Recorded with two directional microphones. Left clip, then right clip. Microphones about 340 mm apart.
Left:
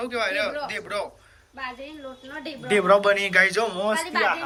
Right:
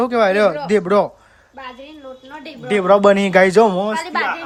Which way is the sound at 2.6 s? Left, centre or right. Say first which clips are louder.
Right 6 dB; centre.